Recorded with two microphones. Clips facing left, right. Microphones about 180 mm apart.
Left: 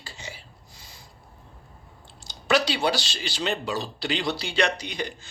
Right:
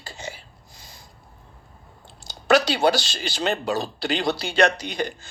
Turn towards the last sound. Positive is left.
turn(degrees=-45)  # may be behind; listen again after turning